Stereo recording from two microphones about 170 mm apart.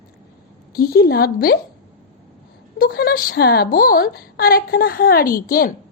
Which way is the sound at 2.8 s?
65° left (ahead or behind).